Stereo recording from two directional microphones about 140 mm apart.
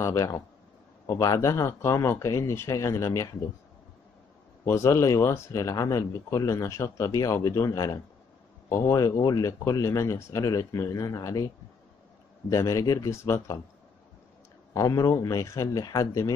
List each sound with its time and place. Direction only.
0.0 s speech: 20° left (ahead or behind)
4.6 s speech: 20° left (ahead or behind)
12.4 s speech: 20° left (ahead or behind)
14.7 s speech: 25° left (ahead or behind)